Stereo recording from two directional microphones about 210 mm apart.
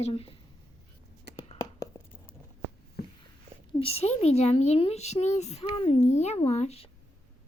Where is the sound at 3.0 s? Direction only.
50° left (ahead or behind).